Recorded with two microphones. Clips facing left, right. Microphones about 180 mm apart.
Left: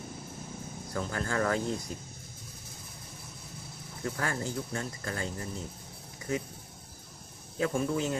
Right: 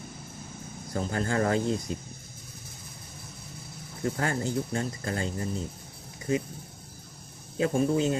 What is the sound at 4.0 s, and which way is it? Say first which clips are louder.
Speech: right 4 dB; 30° right (ahead or behind).